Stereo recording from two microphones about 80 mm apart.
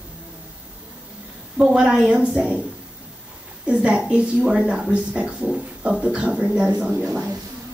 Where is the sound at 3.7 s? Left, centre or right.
Centre.